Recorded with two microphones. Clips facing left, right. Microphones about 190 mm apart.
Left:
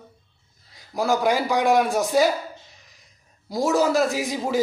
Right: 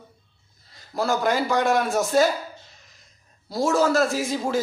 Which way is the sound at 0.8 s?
15° left (ahead or behind).